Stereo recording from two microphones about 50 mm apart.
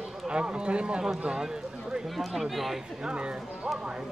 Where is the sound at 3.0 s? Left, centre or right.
Centre.